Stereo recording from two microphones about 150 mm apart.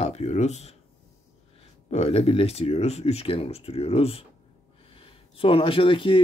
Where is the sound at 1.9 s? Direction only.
40° left (ahead or behind).